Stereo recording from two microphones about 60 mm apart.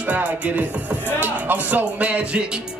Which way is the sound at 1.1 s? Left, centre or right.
Right.